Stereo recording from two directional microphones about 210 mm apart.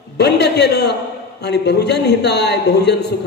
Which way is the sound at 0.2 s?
55° left (ahead or behind).